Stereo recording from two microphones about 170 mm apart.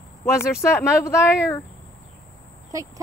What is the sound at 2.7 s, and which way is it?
Speech, 20° right (ahead or behind).